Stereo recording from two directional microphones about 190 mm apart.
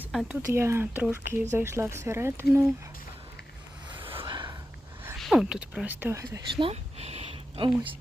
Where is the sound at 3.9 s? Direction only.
25° right (ahead or behind).